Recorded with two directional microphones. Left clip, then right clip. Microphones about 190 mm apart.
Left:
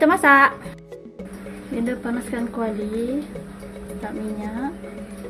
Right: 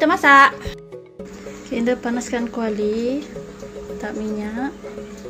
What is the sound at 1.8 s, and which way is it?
Speech, 25° right (ahead or behind).